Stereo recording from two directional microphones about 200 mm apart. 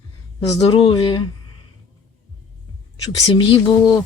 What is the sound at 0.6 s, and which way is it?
Speech, 30° left (ahead or behind).